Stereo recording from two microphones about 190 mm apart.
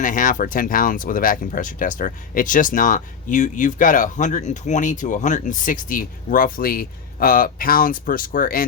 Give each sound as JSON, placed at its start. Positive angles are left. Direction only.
{"t": 0.0, "sound": "speech", "side_deg": 45}